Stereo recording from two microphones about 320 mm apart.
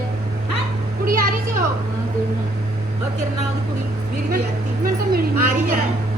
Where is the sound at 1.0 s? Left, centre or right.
Right.